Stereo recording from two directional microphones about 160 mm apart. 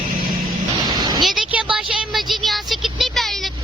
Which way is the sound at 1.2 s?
5° right (ahead or behind).